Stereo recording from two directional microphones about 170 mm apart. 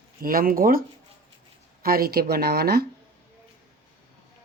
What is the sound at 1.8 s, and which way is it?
Speech, 60° right (ahead or behind).